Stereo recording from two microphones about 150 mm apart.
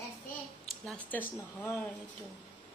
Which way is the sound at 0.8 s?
10° left (ahead or behind).